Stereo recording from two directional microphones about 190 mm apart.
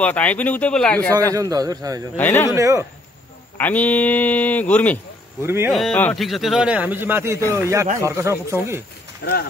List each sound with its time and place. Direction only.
0.0 s speech: 10° left (ahead or behind)
1.3 s a man's voice: 20° right (ahead or behind)
2.1 s speech: 10° left (ahead or behind)
2.5 s speech: 15° right (ahead or behind)
3.5 s speech: 10° left (ahead or behind)
5.4 s speech: 10° right (ahead or behind)
5.8 s a man's voice: 5° left (ahead or behind); by 8.8 s 15° right (ahead or behind)
9.2 s speech: 55° left (ahead or behind)